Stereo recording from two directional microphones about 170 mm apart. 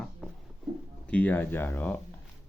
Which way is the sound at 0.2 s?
5° right (ahead or behind).